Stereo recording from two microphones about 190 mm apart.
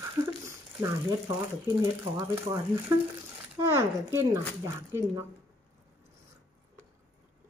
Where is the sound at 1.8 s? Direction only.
15° right (ahead or behind).